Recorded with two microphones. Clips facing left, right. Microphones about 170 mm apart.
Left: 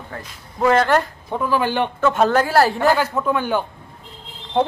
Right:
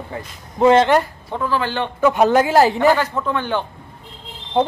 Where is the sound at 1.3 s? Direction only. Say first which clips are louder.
Left 2 dB; 15° left (ahead or behind).